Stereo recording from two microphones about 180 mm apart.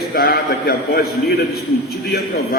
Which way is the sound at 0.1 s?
60° left (ahead or behind).